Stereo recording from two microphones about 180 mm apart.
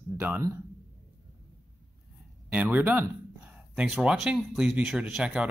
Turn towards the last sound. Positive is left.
turn(degrees=-5)  # may be behind; listen again after turning